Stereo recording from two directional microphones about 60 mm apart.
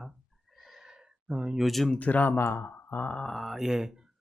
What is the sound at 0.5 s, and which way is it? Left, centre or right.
Gasp, centre.